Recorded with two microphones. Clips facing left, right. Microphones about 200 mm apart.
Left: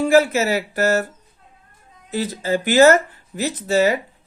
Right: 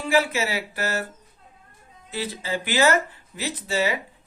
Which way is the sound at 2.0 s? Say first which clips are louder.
Left 7 dB; 45° left (ahead or behind).